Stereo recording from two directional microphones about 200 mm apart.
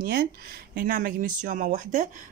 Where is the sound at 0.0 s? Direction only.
50° right (ahead or behind).